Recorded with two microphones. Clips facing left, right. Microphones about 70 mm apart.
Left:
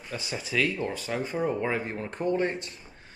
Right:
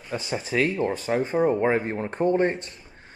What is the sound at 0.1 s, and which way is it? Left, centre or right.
Speech, right.